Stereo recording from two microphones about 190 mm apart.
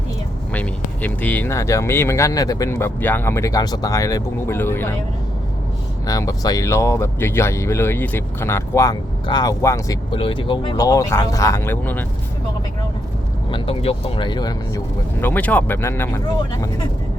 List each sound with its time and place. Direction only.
0.5 s speech: 10° left (ahead or behind)
6.1 s speech: 20° left (ahead or behind)
13.5 s speech: 25° left (ahead or behind)
15.2 s speech: 10° left (ahead or behind)